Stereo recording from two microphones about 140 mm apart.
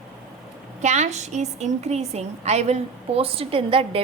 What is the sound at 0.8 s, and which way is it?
A woman's voice, 55° right (ahead or behind).